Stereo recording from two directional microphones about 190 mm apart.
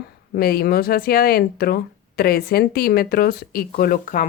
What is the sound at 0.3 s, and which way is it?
Speech, 50° left (ahead or behind).